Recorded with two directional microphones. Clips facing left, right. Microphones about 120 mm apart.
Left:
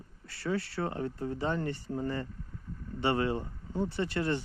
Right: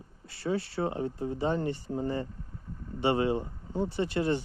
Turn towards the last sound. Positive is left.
turn(degrees=-20)  # may be behind; listen again after turning